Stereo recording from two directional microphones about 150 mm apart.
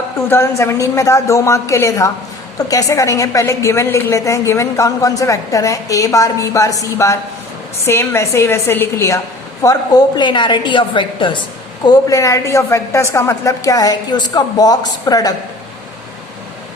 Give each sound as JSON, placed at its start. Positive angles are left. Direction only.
{"t": 0.3, "sound": "a woman's voice", "side_deg": 15}